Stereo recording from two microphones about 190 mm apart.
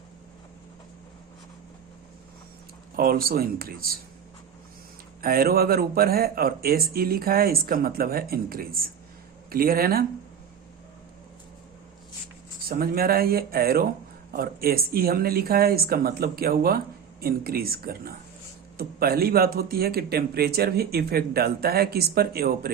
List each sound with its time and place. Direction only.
2.9 s speech: 50° right (ahead or behind)
5.2 s speech: 50° right (ahead or behind)
12.6 s speech: 50° right (ahead or behind)